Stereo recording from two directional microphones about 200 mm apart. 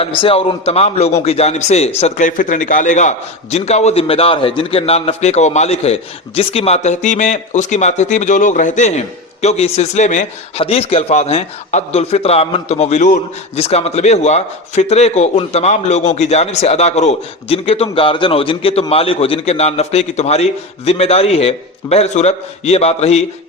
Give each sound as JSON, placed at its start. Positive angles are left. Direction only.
{"t": 0.0, "sound": "speech", "side_deg": 30}